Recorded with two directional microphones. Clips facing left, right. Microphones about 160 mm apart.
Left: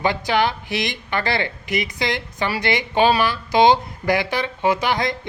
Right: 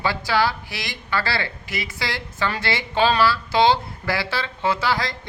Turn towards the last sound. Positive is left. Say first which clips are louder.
# left 3 dB
turn(degrees=20)  # may be behind; listen again after turning